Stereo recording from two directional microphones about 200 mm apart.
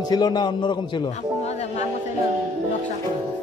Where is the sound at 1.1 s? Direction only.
35° left (ahead or behind).